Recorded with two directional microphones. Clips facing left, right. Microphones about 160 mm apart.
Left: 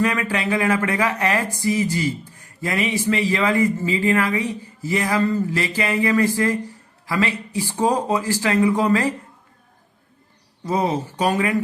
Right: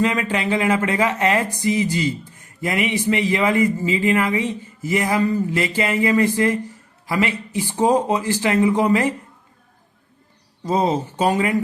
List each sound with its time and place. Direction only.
0.0 s speech: 25° right (ahead or behind)
10.7 s speech: 25° right (ahead or behind)